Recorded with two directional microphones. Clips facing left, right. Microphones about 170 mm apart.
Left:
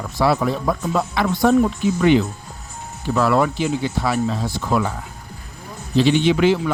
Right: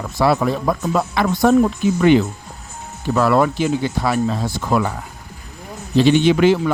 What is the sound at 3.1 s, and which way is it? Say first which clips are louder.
A man's voice: right 2 dB; 50° right (ahead or behind).